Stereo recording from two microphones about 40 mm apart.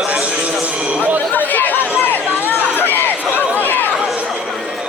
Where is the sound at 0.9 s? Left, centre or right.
Right.